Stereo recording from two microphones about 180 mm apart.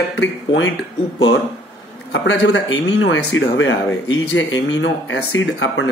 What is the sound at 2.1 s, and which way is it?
A man's voice, 90° left.